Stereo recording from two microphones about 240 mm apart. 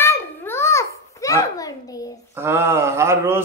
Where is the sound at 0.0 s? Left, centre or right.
Centre.